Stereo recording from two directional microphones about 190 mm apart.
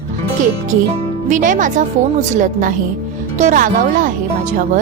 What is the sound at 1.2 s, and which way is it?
Speech, 40° right (ahead or behind).